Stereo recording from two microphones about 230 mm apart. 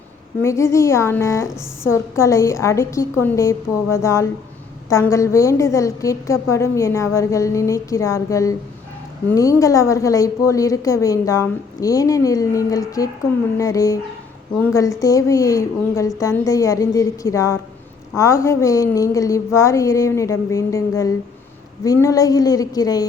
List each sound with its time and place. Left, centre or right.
0.4 s a woman's voice: centre